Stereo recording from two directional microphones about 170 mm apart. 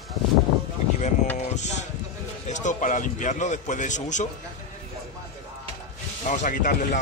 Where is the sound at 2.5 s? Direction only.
45° left (ahead or behind).